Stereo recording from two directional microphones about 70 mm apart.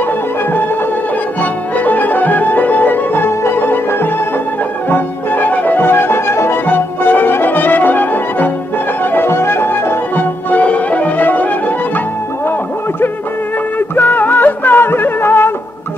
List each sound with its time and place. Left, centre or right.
1.4 s music: left
13.7 s music: left